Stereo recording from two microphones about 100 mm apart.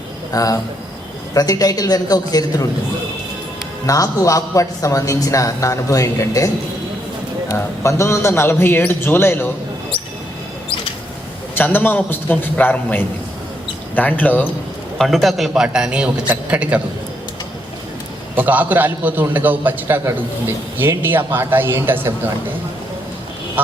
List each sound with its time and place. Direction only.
0.3 s a man's voice: 35° left (ahead or behind)
3.8 s a man's voice: 35° left (ahead or behind)
11.5 s a man's voice: 20° left (ahead or behind)
14.9 s a man's voice: centre (ahead or behind)
18.3 s a man's voice: 15° right (ahead or behind)
21.0 s speech: 20° right (ahead or behind)